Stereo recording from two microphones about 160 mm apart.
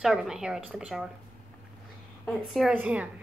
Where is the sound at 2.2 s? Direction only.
Centre (ahead or behind).